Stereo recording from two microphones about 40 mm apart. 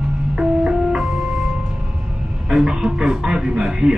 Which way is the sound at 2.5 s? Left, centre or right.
Centre.